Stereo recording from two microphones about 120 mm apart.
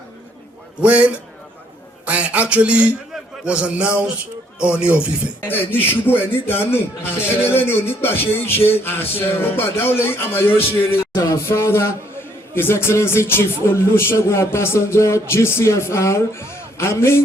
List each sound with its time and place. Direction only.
0.8 s speech: 10° right (ahead or behind)
5.4 s speech: 15° left (ahead or behind)